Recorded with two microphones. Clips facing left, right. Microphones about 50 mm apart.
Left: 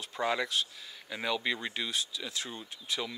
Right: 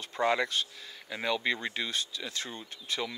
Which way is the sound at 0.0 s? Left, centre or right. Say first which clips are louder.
Right 3 dB; centre.